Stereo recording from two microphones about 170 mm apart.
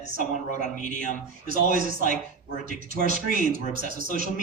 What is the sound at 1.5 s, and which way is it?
Speech, 55° right (ahead or behind).